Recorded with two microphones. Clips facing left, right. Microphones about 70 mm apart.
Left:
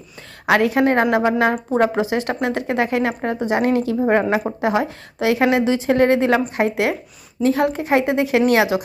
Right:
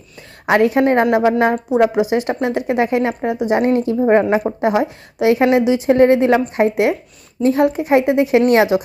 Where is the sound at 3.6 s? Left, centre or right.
Right.